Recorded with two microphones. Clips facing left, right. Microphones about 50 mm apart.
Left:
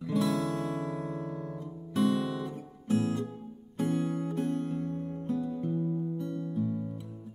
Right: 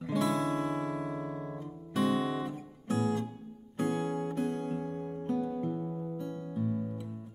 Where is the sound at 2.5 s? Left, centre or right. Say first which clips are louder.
Left 3 dB; right.